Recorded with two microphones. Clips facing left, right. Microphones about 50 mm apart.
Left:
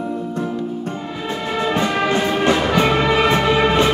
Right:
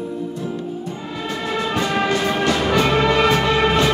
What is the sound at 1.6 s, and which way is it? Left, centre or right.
Brass instrument, left.